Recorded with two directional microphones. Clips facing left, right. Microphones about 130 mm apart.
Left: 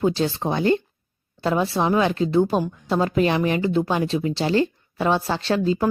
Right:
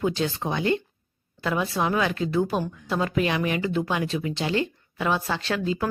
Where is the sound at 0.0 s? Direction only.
30° left (ahead or behind).